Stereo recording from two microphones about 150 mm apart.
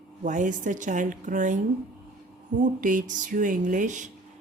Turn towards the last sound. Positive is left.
turn(degrees=-55)  # may be behind; listen again after turning